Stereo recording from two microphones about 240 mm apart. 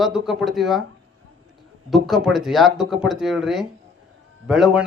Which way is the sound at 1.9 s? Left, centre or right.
Centre.